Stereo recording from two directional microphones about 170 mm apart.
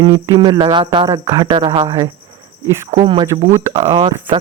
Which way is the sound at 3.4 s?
40° right (ahead or behind).